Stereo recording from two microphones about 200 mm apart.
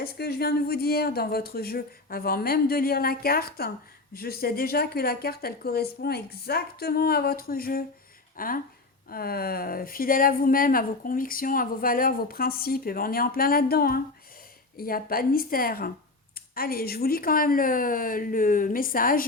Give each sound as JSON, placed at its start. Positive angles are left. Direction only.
{"t": 0.0, "sound": "speech", "side_deg": 50}